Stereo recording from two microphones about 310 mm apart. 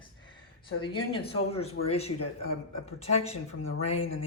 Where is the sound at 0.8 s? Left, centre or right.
Centre.